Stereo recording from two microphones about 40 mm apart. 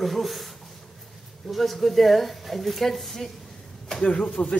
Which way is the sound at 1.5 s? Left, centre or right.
Centre.